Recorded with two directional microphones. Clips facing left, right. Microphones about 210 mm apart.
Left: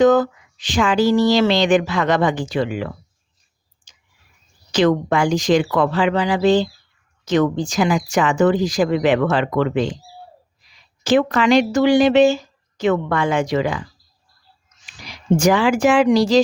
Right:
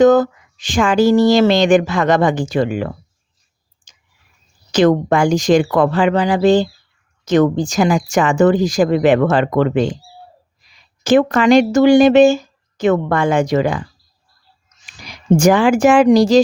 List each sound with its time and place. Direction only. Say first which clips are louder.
0.0 s speech: right 3 dB; 45° right (ahead or behind)
4.7 s speech: right 4 dB; 45° right (ahead or behind)
11.0 s speech: right 4 dB; 50° right (ahead or behind)
14.8 s speech: right 4 dB; 45° right (ahead or behind)